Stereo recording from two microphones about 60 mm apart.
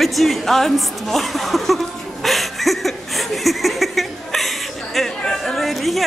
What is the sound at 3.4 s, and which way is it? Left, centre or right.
Chuckle, centre.